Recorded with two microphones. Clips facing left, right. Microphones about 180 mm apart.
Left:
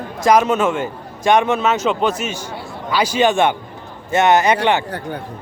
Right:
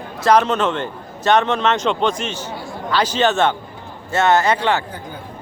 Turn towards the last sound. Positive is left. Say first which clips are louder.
# left 2 dB
turn(degrees=20)  # may be behind; listen again after turning